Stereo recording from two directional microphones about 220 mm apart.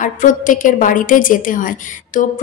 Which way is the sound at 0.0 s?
35° left (ahead or behind).